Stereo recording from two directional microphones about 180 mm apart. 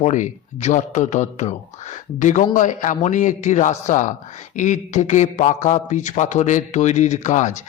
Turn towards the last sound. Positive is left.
turn(degrees=40)  # may be behind; listen again after turning